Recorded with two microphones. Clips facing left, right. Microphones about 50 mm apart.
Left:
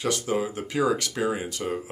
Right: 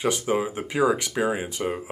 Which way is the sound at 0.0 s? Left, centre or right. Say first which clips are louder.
Right 2 dB; centre.